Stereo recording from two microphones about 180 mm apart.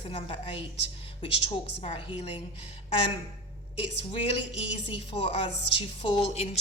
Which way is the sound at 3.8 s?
30° left (ahead or behind).